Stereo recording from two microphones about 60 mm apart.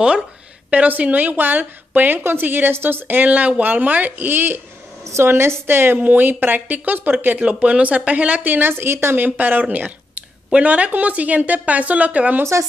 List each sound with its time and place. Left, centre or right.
0.7 s a woman's voice: right
7.3 s speech: centre